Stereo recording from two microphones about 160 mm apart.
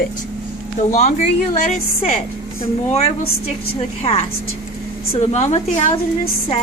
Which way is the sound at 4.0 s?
35° left (ahead or behind).